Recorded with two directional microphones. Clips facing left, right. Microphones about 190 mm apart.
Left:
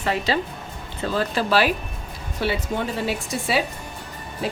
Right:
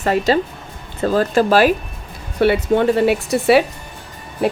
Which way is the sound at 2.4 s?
60° right (ahead or behind).